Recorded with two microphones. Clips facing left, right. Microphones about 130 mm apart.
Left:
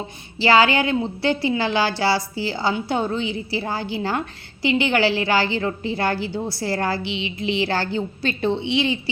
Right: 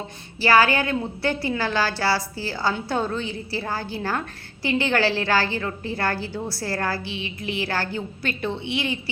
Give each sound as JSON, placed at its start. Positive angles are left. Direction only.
{"t": 0.3, "sound": "a woman's voice", "side_deg": 20}